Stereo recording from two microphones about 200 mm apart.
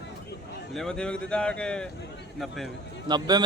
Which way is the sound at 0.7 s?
5° left (ahead or behind).